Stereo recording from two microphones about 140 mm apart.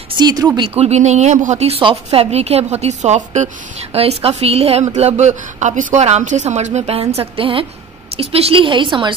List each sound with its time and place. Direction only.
0.2 s speech: 25° right (ahead or behind)
0.7 s a woman's voice: 50° right (ahead or behind)
3.9 s a woman's voice: 45° right (ahead or behind)